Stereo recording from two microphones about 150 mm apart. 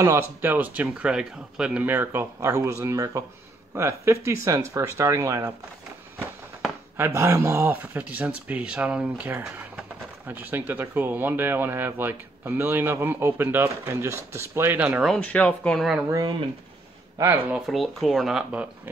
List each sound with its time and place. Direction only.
0.0 s speech: 15° right (ahead or behind)
7.0 s speech: 15° right (ahead or behind)
15.1 s speech: 10° left (ahead or behind)
16.2 s speech: 30° right (ahead or behind)
17.2 s speech: 15° right (ahead or behind)
17.6 s speech: centre (ahead or behind)